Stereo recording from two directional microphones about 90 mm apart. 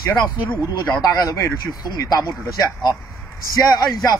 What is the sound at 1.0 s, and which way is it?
Speech, 40° left (ahead or behind).